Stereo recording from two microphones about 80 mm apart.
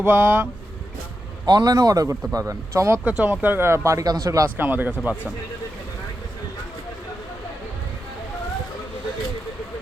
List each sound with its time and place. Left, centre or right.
0.0 s speech: centre
1.5 s a man's voice: right
3.0 s speech: centre; by 4.0 s right
4.0 s a man's voice: right
4.5 s speech: right